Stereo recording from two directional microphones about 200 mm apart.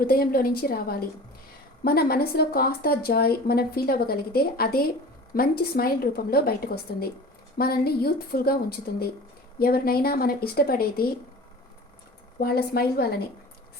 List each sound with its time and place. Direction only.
0.0 s speech: 45° left (ahead or behind)
12.4 s speech: 50° left (ahead or behind)